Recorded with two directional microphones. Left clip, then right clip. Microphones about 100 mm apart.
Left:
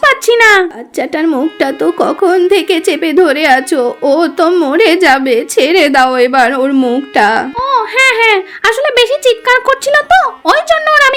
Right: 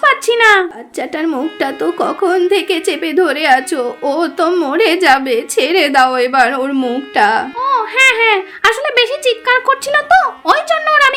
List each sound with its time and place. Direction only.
0.0 s a child's voice: 50° left (ahead or behind)
7.1 s speech: 55° left (ahead or behind)